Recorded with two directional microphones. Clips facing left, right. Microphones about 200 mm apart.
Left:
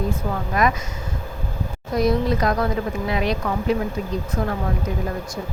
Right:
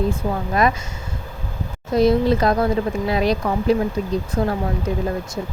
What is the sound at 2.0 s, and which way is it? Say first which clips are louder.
Speech: right 4 dB; 30° right (ahead or behind).